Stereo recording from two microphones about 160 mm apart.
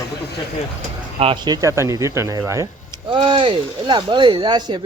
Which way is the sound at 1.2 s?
30° right (ahead or behind).